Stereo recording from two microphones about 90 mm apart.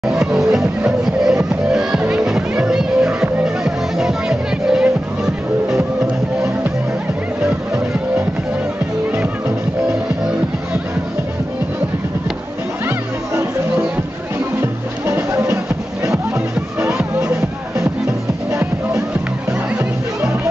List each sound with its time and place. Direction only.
0.0 s music: 5° right (ahead or behind)
12.8 s music: 30° right (ahead or behind)
14.6 s music: 30° right (ahead or behind)